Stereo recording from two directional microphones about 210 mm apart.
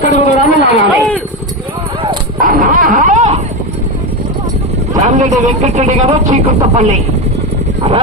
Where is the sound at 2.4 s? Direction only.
40° right (ahead or behind).